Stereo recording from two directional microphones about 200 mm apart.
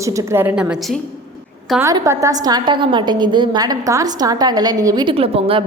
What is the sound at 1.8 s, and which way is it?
A woman's voice, 15° right (ahead or behind).